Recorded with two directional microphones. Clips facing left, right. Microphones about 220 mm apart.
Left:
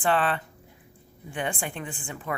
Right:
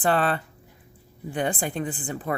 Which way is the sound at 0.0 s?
40° right (ahead or behind).